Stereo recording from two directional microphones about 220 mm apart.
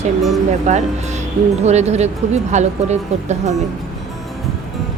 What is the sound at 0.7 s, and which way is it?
Speech, 30° right (ahead or behind).